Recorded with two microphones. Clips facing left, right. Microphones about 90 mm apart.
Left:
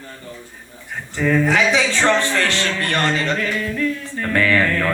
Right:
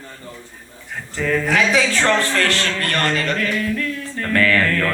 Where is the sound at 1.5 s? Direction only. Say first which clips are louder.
Even; 20° left (ahead or behind).